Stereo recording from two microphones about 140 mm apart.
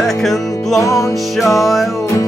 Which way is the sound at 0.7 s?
25° left (ahead or behind).